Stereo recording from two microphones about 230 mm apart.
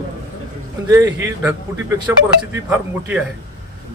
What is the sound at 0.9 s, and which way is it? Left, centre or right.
Speech, centre.